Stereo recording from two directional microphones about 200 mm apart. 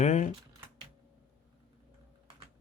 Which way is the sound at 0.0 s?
35° left (ahead or behind).